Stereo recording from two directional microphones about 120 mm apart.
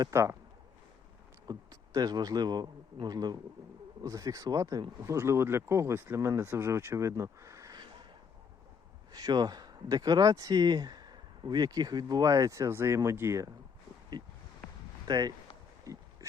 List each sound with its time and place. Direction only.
0.0 s speech: 25° right (ahead or behind)
1.5 s speech: 30° right (ahead or behind)
7.8 s a sound: 40° right (ahead or behind)
9.1 s speech: 35° right (ahead or behind)
14.1 s speech: 35° right (ahead or behind)